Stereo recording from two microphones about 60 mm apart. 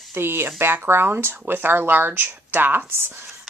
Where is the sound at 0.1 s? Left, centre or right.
Right.